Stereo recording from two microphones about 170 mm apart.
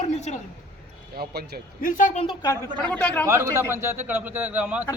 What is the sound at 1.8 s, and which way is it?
Speech, 50° left (ahead or behind).